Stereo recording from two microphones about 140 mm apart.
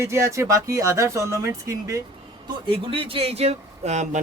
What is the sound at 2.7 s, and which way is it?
Speech, 40° right (ahead or behind).